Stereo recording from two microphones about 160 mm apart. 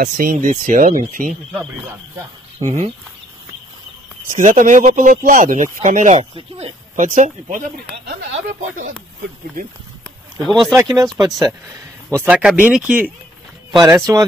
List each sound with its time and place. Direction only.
0.0 s speech: 60° right (ahead or behind)
2.6 s speech: 45° right (ahead or behind)
4.4 s speech: 55° right (ahead or behind)
7.1 s speech: 60° right (ahead or behind); by 8.3 s 75° right (ahead or behind)
8.5 s speech: 55° right (ahead or behind)
10.5 s speech: centre (ahead or behind)
10.8 s speech: 20° right (ahead or behind)
12.1 s speech: 10° right (ahead or behind)
13.7 s speech: 25° right (ahead or behind)